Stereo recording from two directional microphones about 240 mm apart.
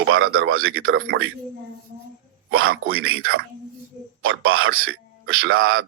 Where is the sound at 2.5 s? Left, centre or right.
Right.